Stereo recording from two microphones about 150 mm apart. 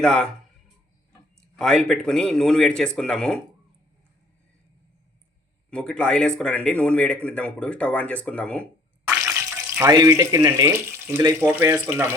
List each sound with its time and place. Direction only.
0.0 s speech: 5° left (ahead or behind)
1.4 s speech: 5° left (ahead or behind)
5.7 s speech: 5° left (ahead or behind)
9.0 s speech: 15° right (ahead or behind)